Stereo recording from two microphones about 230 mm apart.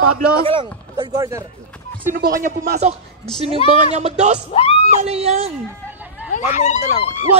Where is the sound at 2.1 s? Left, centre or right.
Right.